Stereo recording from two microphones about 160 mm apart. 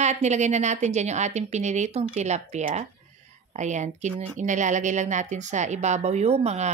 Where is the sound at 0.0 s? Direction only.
45° right (ahead or behind).